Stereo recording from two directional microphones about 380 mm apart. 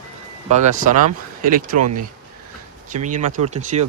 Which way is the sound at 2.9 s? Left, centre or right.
Centre.